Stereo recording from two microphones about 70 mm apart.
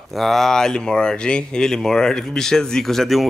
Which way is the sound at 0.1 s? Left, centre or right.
Centre.